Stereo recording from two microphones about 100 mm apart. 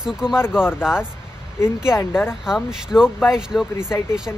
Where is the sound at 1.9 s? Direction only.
20° left (ahead or behind).